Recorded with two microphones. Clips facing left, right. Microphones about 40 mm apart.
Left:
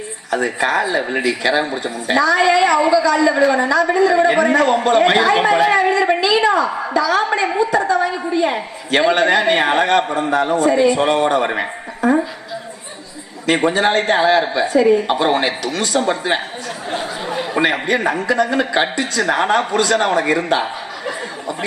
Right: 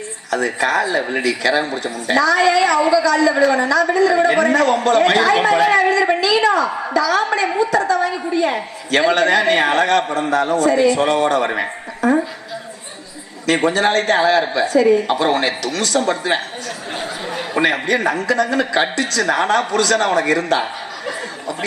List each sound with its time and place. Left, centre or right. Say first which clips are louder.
0.3 s a woman's voice: even; left
6.1 s a sound: even; left
6.9 s a man's voice: even; centre
11.5 s a sound: even; centre
13.7 s a man's voice: even; centre
17.0 s chatter: left 2 dB; centre
17.8 s a woman's voice: even; centre